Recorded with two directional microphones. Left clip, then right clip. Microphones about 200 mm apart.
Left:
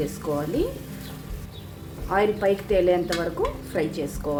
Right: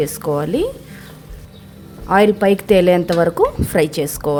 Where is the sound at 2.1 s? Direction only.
55° right (ahead or behind).